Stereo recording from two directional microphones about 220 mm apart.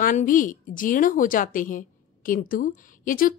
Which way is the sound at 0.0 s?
35° left (ahead or behind).